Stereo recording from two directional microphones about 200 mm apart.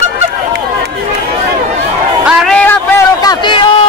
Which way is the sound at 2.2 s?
Centre (ahead or behind).